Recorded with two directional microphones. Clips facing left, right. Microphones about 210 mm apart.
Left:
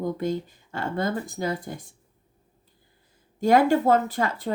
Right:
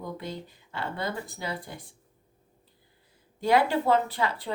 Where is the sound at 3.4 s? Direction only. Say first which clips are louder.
Left 5 dB; 45° left (ahead or behind).